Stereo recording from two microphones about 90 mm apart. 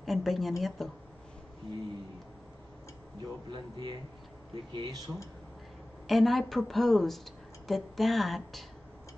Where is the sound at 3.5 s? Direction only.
60° right (ahead or behind).